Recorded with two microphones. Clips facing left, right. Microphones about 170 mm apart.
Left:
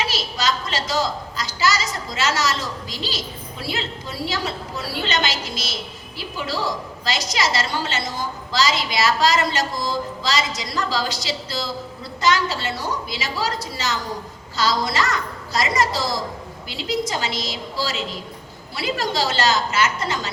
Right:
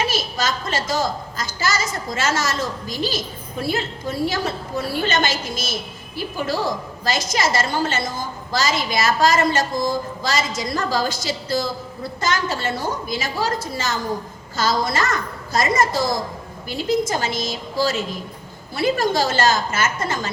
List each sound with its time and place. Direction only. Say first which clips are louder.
0.0 s a woman's voice: right 1 dB; 50° right (ahead or behind)